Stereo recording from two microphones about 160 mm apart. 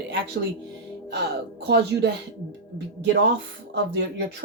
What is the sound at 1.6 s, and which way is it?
Speech, 90° right.